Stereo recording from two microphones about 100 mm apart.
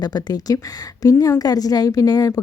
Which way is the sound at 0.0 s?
40° left (ahead or behind).